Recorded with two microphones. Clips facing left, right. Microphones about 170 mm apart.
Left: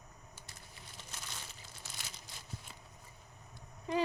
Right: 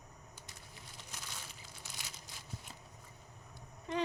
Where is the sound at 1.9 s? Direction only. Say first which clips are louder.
Even; 15° right (ahead or behind).